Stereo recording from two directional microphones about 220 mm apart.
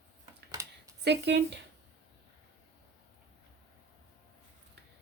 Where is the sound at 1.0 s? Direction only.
50° right (ahead or behind).